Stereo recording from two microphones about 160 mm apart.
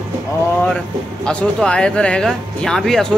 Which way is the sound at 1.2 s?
5° left (ahead or behind).